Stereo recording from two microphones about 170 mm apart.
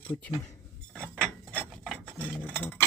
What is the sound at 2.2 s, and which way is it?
Dishes, 10° left (ahead or behind).